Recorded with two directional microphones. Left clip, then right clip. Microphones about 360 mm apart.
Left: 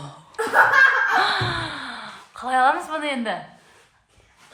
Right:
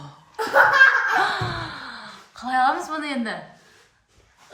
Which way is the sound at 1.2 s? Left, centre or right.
Centre.